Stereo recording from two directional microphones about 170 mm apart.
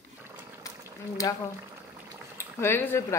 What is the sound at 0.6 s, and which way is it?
Boiling, 20° left (ahead or behind).